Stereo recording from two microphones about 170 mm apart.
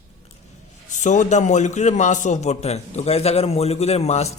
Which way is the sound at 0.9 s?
45° left (ahead or behind).